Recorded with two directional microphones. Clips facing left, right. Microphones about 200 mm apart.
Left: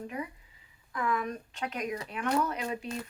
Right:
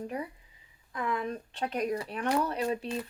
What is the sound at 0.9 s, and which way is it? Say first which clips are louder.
Speech: left 1 dB; 25° right (ahead or behind).